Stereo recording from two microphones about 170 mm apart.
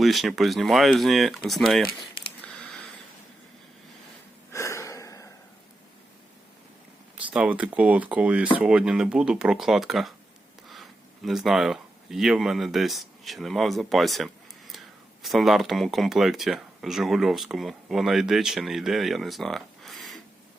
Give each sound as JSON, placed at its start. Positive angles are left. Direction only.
{"t": 0.0, "sound": "speech", "side_deg": 0}
{"t": 2.4, "sound": "a sound", "side_deg": 5}
{"t": 4.5, "sound": "gasp", "side_deg": 15}
{"t": 7.3, "sound": "speech", "side_deg": -5}